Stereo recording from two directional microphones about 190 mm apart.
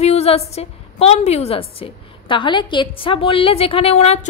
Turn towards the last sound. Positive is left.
turn(degrees=30)  # may be behind; listen again after turning